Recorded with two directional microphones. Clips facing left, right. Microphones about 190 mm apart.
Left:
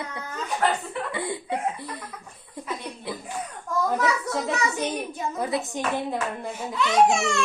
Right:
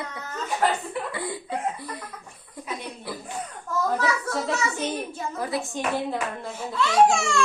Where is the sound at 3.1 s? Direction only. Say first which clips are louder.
Left 2 dB; 20° left (ahead or behind).